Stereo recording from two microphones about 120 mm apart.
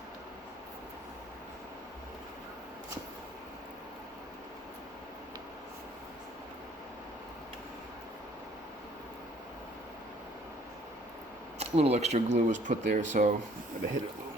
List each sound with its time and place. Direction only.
11.6 s speech: 60° right (ahead or behind); by 13.3 s 90° right